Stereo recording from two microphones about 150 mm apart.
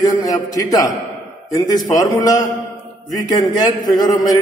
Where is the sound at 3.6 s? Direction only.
25° left (ahead or behind).